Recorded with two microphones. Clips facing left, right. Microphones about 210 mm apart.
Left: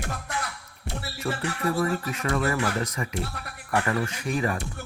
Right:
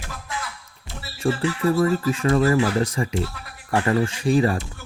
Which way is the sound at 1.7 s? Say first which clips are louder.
Right 6 dB; 30° right (ahead or behind).